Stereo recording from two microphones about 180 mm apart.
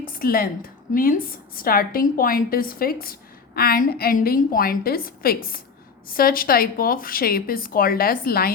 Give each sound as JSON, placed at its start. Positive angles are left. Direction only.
{"t": 0.0, "sound": "a woman's voice", "side_deg": 55}